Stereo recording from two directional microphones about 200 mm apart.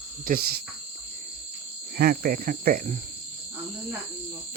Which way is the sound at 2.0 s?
50° right (ahead or behind).